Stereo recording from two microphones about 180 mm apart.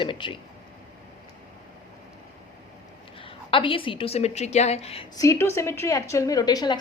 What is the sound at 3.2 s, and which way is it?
A woman's voice, 30° left (ahead or behind).